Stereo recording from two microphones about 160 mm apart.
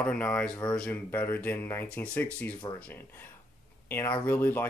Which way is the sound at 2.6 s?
25° left (ahead or behind).